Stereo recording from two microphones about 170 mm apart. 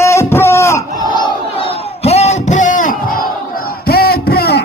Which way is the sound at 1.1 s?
30° left (ahead or behind).